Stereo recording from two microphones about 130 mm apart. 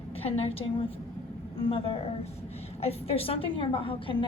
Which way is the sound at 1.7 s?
45° left (ahead or behind).